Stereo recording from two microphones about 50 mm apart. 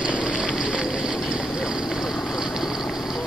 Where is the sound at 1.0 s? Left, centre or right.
Centre.